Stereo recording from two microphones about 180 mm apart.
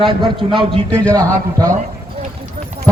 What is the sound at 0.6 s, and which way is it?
A man's voice, 30° right (ahead or behind).